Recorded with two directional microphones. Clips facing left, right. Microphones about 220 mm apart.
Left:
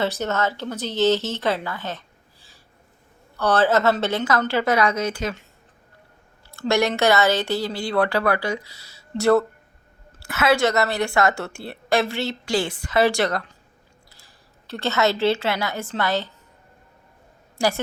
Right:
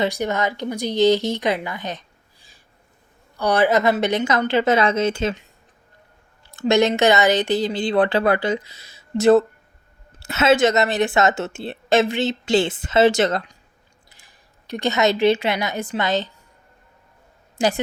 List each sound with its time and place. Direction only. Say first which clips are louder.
0.0 s a woman's voice: right 2 dB; 15° right (ahead or behind)
6.5 s a woman's voice: right 4 dB; 20° right (ahead or behind)
17.6 s a woman's voice: right 2 dB; 20° right (ahead or behind)